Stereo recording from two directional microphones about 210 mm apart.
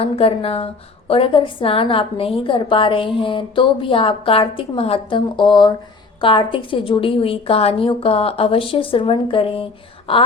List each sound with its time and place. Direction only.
0.0 s a woman's voice: 25° left (ahead or behind)